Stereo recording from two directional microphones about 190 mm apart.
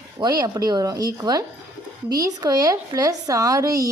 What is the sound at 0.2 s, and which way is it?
A woman's voice, 20° right (ahead or behind).